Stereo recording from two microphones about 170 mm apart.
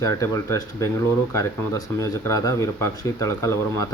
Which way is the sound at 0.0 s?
20° left (ahead or behind).